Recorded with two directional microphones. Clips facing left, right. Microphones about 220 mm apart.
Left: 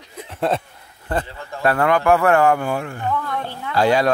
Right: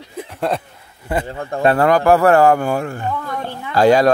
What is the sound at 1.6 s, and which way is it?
Speech, 25° right (ahead or behind).